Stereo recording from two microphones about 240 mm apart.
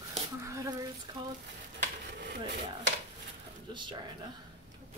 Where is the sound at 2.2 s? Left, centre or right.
Right.